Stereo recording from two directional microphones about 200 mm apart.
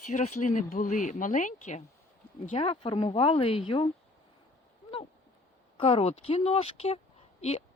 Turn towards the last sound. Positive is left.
turn(degrees=30)  # may be behind; listen again after turning